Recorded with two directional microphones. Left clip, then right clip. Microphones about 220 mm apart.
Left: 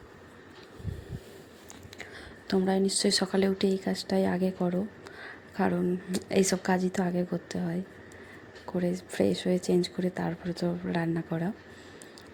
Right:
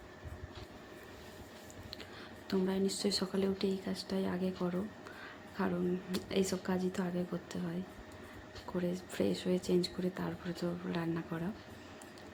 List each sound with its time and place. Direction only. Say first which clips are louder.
2.5 s speech: left 8 dB; 30° left (ahead or behind)
8.7 s speech: left 7 dB; 25° left (ahead or behind)